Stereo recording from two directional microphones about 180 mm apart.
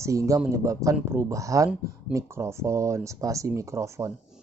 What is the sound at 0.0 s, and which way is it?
Speech, 15° right (ahead or behind).